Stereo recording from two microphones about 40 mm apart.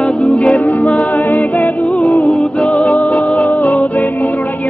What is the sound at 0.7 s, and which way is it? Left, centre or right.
Music, left.